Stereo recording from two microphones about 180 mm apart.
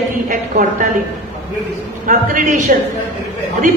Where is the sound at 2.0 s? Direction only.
45° right (ahead or behind).